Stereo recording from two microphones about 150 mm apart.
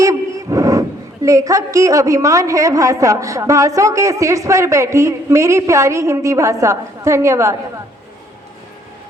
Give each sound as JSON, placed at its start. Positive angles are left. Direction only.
{"t": 0.0, "sound": "a woman's voice", "side_deg": -20}